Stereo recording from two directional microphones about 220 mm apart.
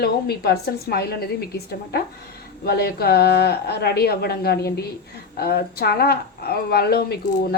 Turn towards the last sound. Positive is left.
turn(degrees=45)  # may be behind; listen again after turning